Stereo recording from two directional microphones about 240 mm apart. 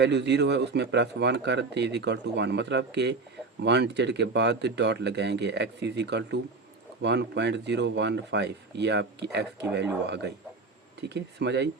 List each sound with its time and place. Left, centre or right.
0.0 s speech: right